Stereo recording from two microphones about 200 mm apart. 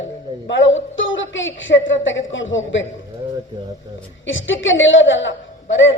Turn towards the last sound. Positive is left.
turn(degrees=70)  # may be behind; listen again after turning